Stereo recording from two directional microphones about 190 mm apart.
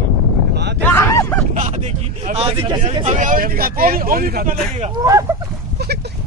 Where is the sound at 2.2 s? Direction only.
30° right (ahead or behind); by 4.5 s 50° right (ahead or behind).